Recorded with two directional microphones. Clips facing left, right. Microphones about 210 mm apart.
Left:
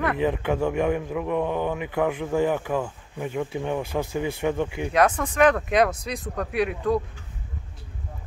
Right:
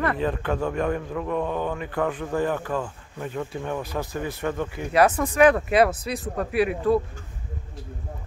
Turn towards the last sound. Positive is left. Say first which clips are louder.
# right 2 dB
turn(degrees=-5)  # may be behind; listen again after turning